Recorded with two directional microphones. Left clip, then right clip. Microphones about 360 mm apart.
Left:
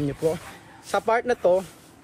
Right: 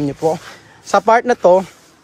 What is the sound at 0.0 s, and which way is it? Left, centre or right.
A man's voice, centre.